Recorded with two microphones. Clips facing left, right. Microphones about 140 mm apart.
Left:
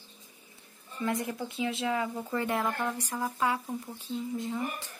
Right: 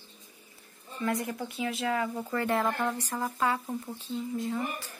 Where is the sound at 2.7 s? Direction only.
10° right (ahead or behind).